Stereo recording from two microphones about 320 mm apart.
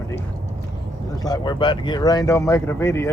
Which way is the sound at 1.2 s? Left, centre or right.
Centre.